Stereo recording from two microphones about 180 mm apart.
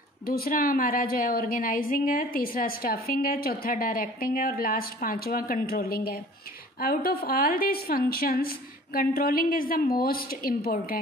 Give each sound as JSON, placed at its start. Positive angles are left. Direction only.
{"t": 0.2, "sound": "a woman's voice", "side_deg": 55}